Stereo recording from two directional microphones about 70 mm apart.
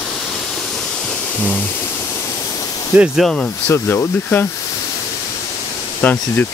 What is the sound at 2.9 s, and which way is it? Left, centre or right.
Speech, right.